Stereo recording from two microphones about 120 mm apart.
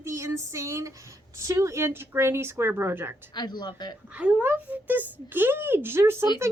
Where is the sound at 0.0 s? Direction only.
25° right (ahead or behind).